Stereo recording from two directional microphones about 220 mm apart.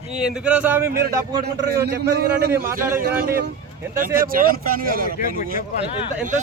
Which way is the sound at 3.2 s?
45° right (ahead or behind).